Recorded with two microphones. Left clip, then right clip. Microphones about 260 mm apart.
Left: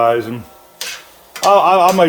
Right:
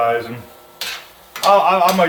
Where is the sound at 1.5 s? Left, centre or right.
Left.